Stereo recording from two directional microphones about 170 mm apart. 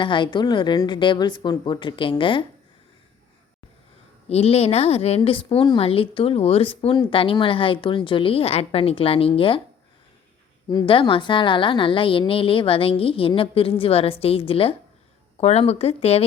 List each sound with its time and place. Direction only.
0.0 s a woman's voice: 30° left (ahead or behind)
4.3 s a woman's voice: 35° left (ahead or behind)
10.7 s a woman's voice: 25° left (ahead or behind)